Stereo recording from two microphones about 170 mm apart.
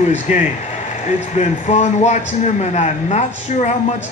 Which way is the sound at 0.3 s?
40° left (ahead or behind).